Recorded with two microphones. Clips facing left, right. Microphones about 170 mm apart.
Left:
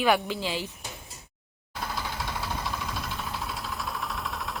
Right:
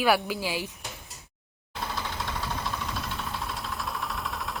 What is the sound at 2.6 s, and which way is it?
Vehicle, centre (ahead or behind).